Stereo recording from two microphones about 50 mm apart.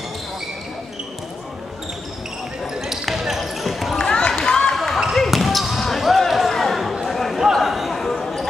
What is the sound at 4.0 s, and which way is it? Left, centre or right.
Basketball bounce, centre.